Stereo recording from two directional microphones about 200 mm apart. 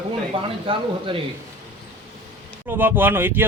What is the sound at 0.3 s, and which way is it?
Speech, 25° right (ahead or behind).